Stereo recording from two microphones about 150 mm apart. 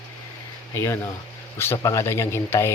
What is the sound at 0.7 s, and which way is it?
Speech, 15° left (ahead or behind).